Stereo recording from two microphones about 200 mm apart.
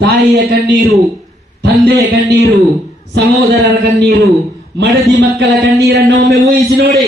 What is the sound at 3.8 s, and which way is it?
Speech, 55° right (ahead or behind).